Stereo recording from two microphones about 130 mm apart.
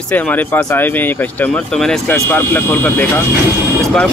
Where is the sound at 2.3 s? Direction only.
15° left (ahead or behind).